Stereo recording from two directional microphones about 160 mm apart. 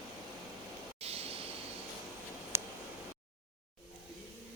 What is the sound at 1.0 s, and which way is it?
Vehicle, 40° right (ahead or behind).